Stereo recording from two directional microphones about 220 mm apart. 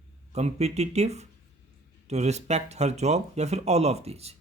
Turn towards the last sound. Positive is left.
turn(degrees=-30)  # may be behind; listen again after turning